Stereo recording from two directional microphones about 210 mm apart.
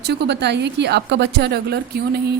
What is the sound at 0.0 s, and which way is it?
A woman's voice, 50° right (ahead or behind).